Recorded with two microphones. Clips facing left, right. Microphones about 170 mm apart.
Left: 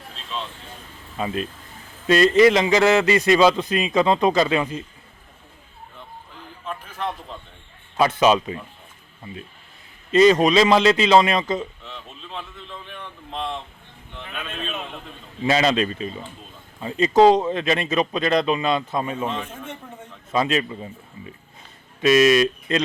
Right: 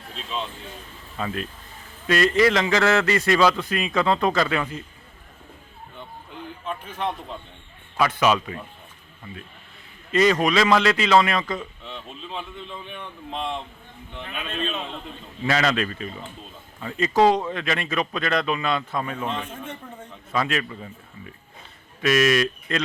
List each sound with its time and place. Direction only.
1.1 s a man's voice: 20° left (ahead or behind)
7.9 s a man's voice: 25° left (ahead or behind)
10.1 s a man's voice: 20° left (ahead or behind)
11.8 s speech: centre (ahead or behind)
15.4 s a man's voice: 20° left (ahead or behind)
19.3 s speech: 5° left (ahead or behind)
20.3 s a man's voice: 20° left (ahead or behind)
22.0 s a man's voice: 25° left (ahead or behind)